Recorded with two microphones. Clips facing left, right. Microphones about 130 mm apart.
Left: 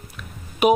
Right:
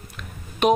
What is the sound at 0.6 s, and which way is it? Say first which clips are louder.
Speech: left 2 dB; 5° left (ahead or behind).